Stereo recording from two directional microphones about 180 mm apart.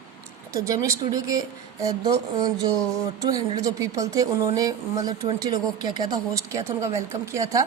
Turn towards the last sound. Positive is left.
turn(degrees=-15)  # may be behind; listen again after turning